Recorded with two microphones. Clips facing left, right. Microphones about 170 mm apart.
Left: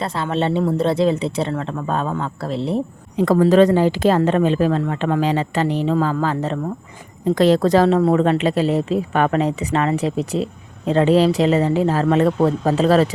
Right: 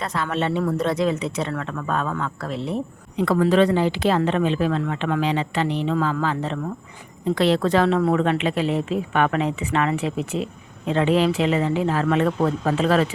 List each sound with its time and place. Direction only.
0.0 s speech: 30° left (ahead or behind)